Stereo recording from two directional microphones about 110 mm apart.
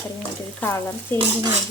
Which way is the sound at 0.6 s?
20° left (ahead or behind).